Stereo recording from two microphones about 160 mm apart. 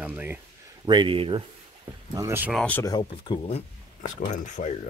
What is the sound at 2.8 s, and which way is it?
Speech, 30° left (ahead or behind).